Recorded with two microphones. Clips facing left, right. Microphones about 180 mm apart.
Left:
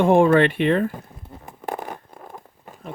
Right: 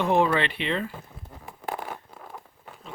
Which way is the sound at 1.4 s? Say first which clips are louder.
Left 3 dB; 45° left (ahead or behind).